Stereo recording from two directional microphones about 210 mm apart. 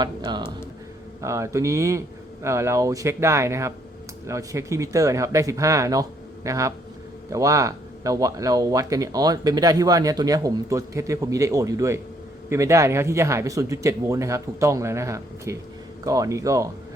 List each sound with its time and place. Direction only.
0.0 s speech: 20° right (ahead or behind)